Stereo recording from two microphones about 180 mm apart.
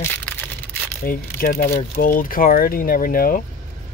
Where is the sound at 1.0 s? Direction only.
50° left (ahead or behind).